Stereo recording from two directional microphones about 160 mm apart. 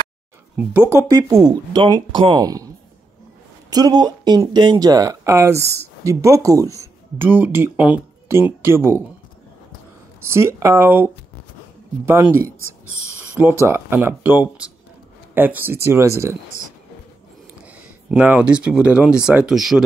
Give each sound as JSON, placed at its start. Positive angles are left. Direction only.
{"t": 0.8, "sound": "speech", "side_deg": -20}
{"t": 3.7, "sound": "speech", "side_deg": -25}
{"t": 10.3, "sound": "speech", "side_deg": -15}
{"t": 13.3, "sound": "speech", "side_deg": -10}
{"t": 17.6, "sound": "speech", "side_deg": -10}